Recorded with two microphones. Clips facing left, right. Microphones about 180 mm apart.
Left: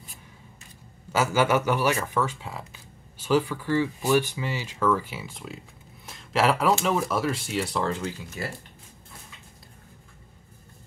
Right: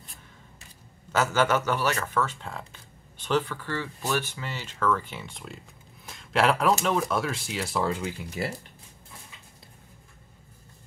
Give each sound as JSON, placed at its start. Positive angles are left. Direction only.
{"t": 1.1, "sound": "speech", "side_deg": 10}
{"t": 6.0, "sound": "a sound", "side_deg": 0}
{"t": 6.8, "sound": "speech", "side_deg": 5}